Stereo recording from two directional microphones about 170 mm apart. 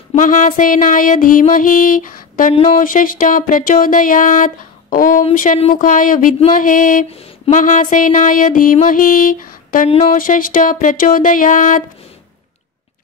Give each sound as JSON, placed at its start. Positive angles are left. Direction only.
{"t": 0.1, "sound": "music", "side_deg": 50}
{"t": 2.5, "sound": "speech", "side_deg": 35}
{"t": 2.8, "sound": "music", "side_deg": 55}